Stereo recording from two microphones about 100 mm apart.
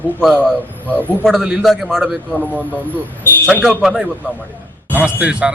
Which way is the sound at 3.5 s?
5° right (ahead or behind).